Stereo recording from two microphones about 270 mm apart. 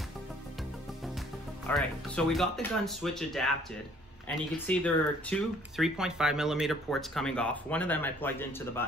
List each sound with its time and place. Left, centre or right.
1.7 s speech: centre
4.6 s speech: centre